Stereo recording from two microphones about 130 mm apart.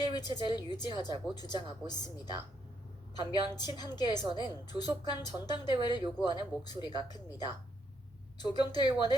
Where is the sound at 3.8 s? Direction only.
30° left (ahead or behind).